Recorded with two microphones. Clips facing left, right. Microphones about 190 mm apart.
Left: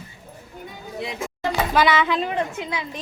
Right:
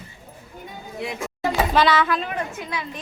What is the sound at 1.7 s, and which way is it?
Speech, 10° left (ahead or behind).